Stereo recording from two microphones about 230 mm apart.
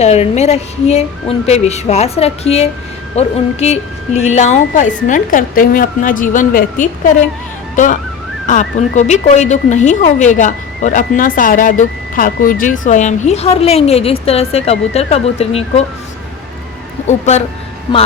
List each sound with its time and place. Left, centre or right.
0.0 s a woman's voice: left
8.4 s speech: left
17.1 s a woman's voice: left